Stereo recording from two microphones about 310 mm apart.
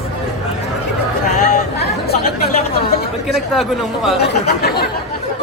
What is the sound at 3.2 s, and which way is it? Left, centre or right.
Speech, centre.